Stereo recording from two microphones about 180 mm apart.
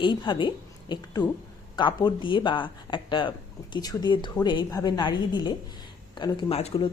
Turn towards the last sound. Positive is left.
turn(degrees=30)  # may be behind; listen again after turning